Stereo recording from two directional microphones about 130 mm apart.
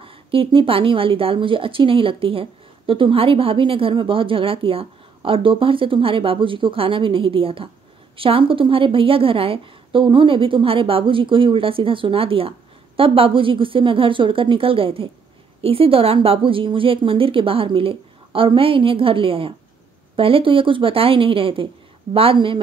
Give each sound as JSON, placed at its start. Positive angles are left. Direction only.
{"t": 0.0, "sound": "a woman's voice", "side_deg": -45}